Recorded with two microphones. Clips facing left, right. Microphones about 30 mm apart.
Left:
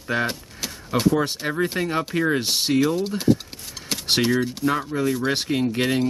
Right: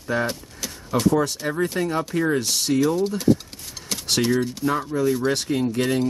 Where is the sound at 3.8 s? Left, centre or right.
Left.